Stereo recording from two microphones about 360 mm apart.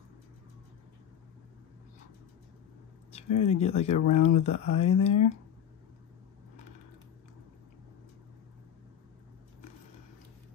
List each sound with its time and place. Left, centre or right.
3.3 s speech: centre